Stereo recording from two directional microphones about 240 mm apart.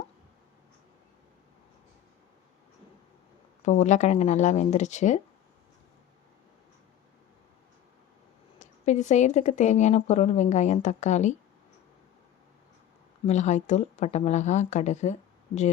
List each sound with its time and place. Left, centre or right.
3.6 s speech: left
8.5 s speech: left
13.2 s speech: left